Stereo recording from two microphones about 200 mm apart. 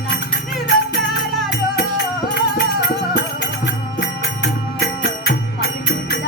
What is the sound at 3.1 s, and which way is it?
Music, 60° left (ahead or behind).